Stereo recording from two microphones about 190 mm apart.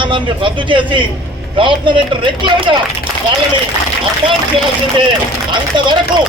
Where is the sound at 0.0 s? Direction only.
25° right (ahead or behind).